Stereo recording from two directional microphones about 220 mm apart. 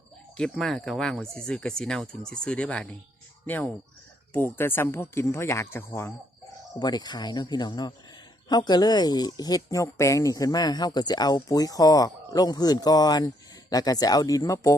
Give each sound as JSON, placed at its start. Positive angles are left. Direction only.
{"t": 0.3, "sound": "speech", "side_deg": 5}